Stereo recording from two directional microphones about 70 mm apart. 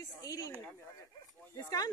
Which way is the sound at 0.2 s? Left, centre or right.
Left.